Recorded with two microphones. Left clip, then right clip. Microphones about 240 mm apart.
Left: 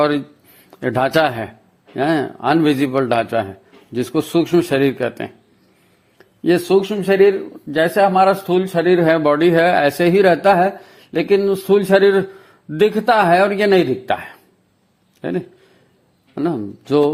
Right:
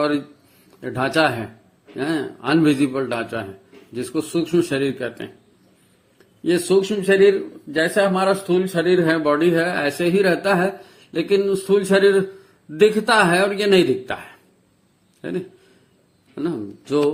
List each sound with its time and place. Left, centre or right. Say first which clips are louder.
0.8 s a man's voice: left 4 dB; left